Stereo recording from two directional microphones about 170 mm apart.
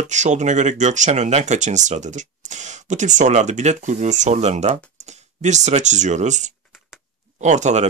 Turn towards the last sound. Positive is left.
turn(degrees=-45)  # may be behind; listen again after turning